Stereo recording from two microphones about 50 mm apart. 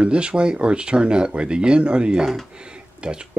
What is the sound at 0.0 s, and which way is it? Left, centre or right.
Speech, right.